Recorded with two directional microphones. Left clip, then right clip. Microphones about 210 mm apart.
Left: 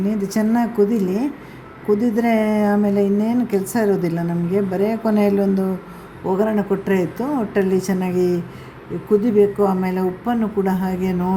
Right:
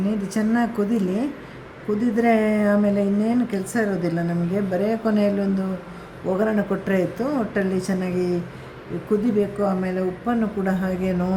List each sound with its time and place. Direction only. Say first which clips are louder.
0.2 s a woman's voice: left 4 dB; 15° left (ahead or behind)
6.4 s speech: left 3 dB; 5° left (ahead or behind)